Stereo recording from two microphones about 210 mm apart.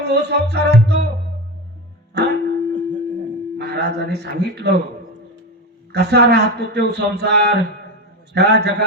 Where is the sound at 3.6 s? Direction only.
50° right (ahead or behind).